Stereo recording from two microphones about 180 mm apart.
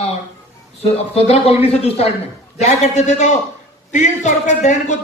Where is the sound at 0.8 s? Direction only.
35° left (ahead or behind).